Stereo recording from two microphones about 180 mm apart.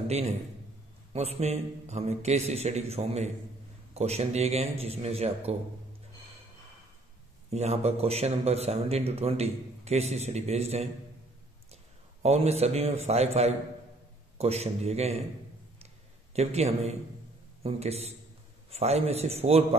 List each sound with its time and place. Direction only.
0.1 s a man's voice: 35° right (ahead or behind)
7.4 s a man's voice: 35° right (ahead or behind)
16.3 s a man's voice: 35° right (ahead or behind)